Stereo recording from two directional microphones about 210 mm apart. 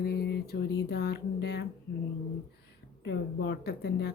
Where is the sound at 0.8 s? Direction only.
50° left (ahead or behind).